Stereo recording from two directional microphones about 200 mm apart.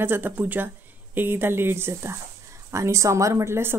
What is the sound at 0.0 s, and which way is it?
A woman's voice, 10° right (ahead or behind).